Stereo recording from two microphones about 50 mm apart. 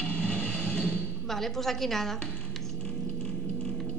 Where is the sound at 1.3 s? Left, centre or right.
Centre.